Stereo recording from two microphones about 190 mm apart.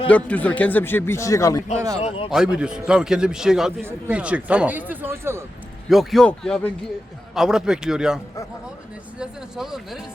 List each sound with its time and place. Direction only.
0.1 s speech: 5° left (ahead or behind)
2.0 s a man's voice: 30° left (ahead or behind)
2.3 s a man's voice: 5° right (ahead or behind)
5.9 s a man's voice: centre (ahead or behind)